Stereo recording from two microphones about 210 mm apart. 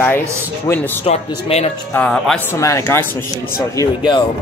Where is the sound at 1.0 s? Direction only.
30° left (ahead or behind).